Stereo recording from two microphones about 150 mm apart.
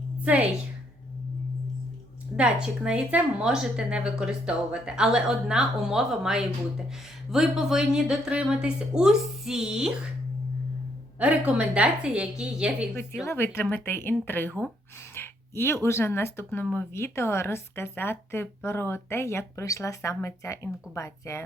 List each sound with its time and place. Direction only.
2.3 s a woman's voice: 5° right (ahead or behind)
11.2 s a woman's voice: 10° right (ahead or behind)
13.2 s speech: 15° left (ahead or behind)